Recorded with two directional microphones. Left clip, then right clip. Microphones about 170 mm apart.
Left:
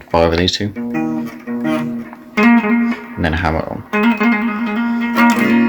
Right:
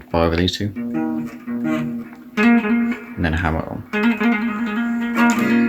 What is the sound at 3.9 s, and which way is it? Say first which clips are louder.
Music: left 5 dB; 50° left (ahead or behind).